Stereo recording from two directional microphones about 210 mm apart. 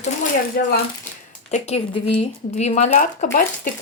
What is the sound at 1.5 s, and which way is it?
Speech, 30° left (ahead or behind).